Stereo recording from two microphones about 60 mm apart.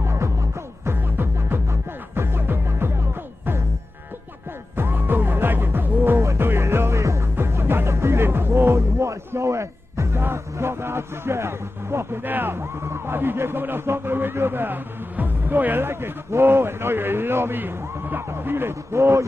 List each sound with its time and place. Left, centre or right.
0.0 s music: right
0.9 s music: right
4.7 s music: right
6.1 s music: right
7.3 s music: right
10.2 s a sound: right
12.2 s speech: right